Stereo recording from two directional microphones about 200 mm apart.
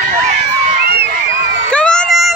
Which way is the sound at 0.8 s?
50° right (ahead or behind).